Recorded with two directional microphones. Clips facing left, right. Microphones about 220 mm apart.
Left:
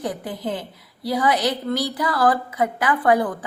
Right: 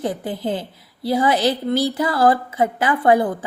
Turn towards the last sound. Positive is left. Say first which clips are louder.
# right 3 dB
turn(degrees=-25)  # may be behind; listen again after turning